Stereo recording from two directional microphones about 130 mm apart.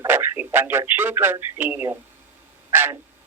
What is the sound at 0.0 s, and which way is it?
Speech, 15° right (ahead or behind).